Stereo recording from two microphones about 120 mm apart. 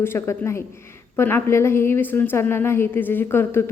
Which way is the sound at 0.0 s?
20° left (ahead or behind).